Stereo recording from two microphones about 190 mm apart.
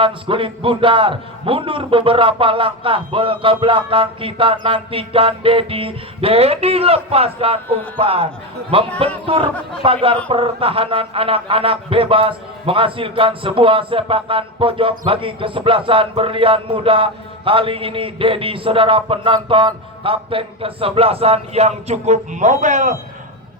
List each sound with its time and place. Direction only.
0.0 s a man's voice: 25° right (ahead or behind)